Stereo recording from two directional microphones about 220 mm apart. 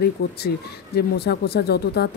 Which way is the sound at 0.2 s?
45° left (ahead or behind).